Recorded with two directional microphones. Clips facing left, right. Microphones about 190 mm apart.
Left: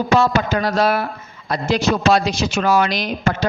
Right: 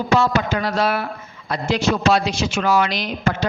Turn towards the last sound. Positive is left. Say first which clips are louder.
# left 2 dB
turn(degrees=40)  # may be behind; listen again after turning